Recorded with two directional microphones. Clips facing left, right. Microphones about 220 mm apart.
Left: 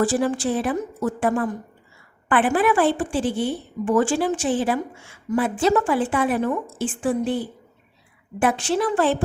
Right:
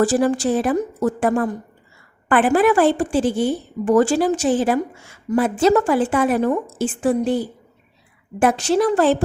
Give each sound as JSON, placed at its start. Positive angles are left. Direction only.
{"t": 0.0, "sound": "a woman's voice", "side_deg": -40}